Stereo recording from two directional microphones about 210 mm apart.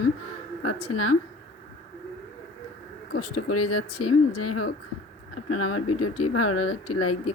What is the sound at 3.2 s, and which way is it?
Speech, 90° left.